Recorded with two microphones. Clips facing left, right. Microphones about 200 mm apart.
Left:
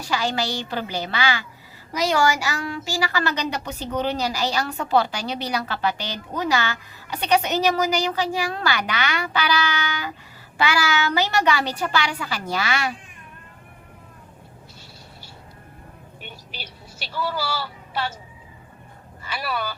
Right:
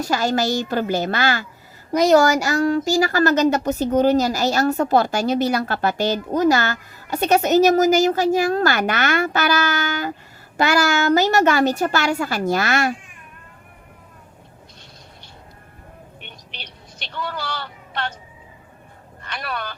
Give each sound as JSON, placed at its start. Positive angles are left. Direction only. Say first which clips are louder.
{"t": 0.0, "sound": "speech", "louder": "right 5 dB", "side_deg": -45}
{"t": 16.2, "sound": "vehicle", "louder": "left 5 dB", "side_deg": 5}
{"t": 19.2, "sound": "speech", "louder": "left 1 dB", "side_deg": 5}